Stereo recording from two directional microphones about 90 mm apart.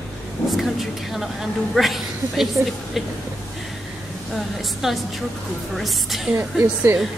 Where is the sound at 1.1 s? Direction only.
Centre (ahead or behind).